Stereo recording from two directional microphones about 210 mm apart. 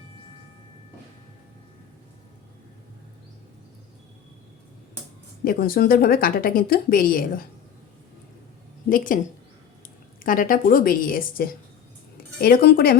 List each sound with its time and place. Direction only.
5.5 s speech: 45° left (ahead or behind)
8.9 s a woman's voice: 40° left (ahead or behind)
10.2 s a woman's voice: 40° left (ahead or behind)